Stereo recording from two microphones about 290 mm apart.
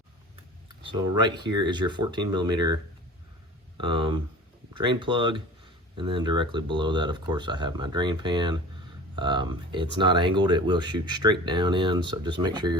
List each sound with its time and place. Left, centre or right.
0.8 s a sound: centre
1.2 s speech: centre
3.8 s speech: centre